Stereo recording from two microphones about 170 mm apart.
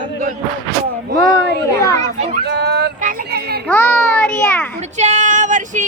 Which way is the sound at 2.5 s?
75° right (ahead or behind).